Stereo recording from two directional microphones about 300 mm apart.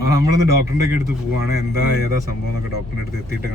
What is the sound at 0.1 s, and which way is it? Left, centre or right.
Speech, centre.